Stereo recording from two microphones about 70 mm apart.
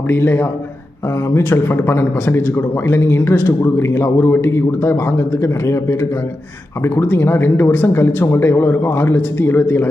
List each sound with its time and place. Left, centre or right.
0.1 s speech: left